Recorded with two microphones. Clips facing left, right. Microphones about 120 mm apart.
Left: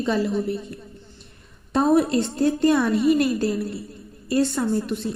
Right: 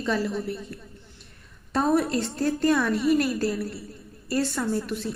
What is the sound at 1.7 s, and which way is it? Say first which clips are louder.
Speech: left 4 dB; 5° left (ahead or behind).